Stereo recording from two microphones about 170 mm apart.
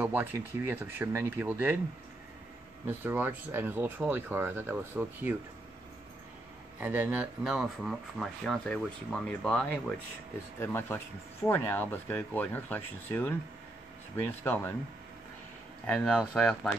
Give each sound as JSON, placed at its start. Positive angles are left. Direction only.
{"t": 0.0, "sound": "speech", "side_deg": -10}
{"t": 2.9, "sound": "speech", "side_deg": -10}
{"t": 6.8, "sound": "speech", "side_deg": -10}
{"t": 14.4, "sound": "speech", "side_deg": 15}
{"t": 15.9, "sound": "speech", "side_deg": 5}